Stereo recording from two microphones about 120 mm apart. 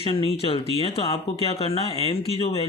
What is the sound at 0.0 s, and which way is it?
Speech, 50° left (ahead or behind).